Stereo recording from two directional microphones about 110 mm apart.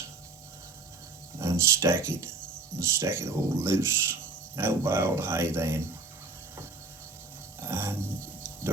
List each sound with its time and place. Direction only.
1.4 s speech: 25° right (ahead or behind)
7.6 s mechanisms: 20° right (ahead or behind)